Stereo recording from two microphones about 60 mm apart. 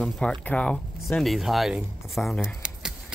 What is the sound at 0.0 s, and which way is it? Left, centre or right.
Speech, centre.